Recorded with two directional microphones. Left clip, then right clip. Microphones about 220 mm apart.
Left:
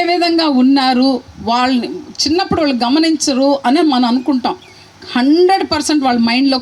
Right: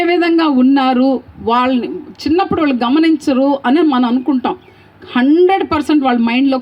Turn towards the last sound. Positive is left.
turn(degrees=40)  # may be behind; listen again after turning